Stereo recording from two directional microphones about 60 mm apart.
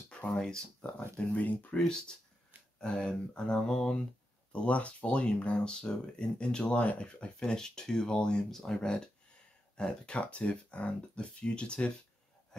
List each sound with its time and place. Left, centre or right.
0.1 s speech: centre